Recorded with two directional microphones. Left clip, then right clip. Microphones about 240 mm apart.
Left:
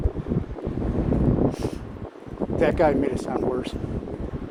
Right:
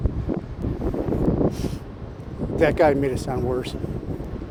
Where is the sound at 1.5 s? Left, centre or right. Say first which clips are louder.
Left 2 dB; right.